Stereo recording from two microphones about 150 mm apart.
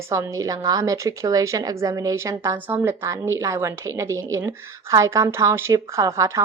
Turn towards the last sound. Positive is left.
turn(degrees=-20)  # may be behind; listen again after turning